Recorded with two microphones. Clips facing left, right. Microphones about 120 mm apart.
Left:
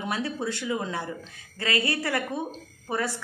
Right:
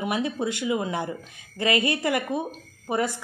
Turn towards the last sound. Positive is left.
turn(degrees=-15)  # may be behind; listen again after turning